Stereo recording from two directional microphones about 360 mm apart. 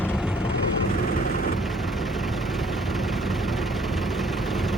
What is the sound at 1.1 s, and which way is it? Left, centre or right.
Vehicle, left.